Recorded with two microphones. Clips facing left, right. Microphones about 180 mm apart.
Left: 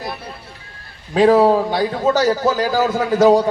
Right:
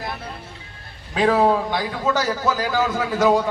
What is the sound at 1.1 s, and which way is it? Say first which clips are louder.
A man's voice: left 6 dB; 35° left (ahead or behind).